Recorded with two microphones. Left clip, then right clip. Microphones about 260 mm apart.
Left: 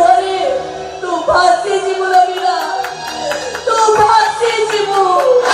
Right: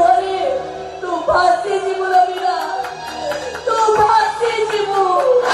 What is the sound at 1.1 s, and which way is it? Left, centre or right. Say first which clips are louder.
Music: left 3 dB; right.